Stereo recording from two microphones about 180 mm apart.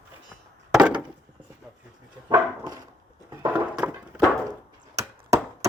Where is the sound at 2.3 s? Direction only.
20° right (ahead or behind).